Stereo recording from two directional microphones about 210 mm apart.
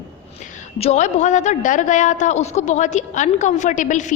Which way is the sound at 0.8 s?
35° left (ahead or behind).